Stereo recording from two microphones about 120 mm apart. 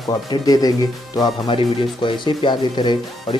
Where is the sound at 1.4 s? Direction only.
45° left (ahead or behind).